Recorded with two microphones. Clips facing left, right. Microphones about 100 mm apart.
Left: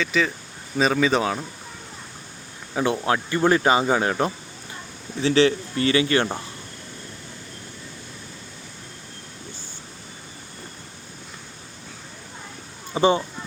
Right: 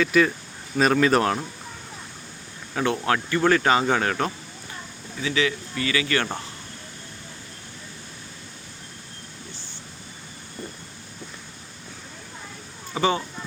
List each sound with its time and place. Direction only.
0.0 s speech: 5° right (ahead or behind)
2.7 s speech: 15° left (ahead or behind)
5.2 s a man's voice: 35° left (ahead or behind)
12.9 s speech: 25° left (ahead or behind)